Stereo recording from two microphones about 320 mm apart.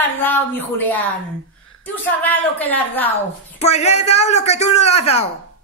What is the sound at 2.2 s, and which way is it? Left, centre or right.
Speech, centre.